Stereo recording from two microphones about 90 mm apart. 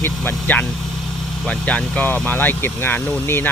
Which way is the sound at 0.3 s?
20° left (ahead or behind).